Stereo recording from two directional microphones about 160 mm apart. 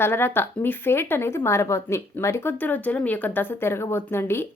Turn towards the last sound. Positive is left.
turn(degrees=15)  # may be behind; listen again after turning